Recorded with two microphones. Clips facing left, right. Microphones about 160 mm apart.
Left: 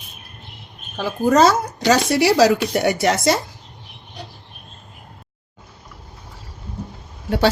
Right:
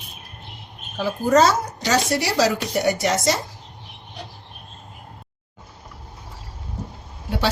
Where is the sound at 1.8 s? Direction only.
70° left (ahead or behind).